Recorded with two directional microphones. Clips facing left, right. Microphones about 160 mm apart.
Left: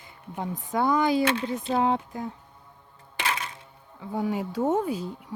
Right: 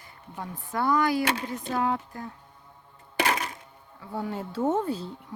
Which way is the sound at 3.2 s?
40° right (ahead or behind).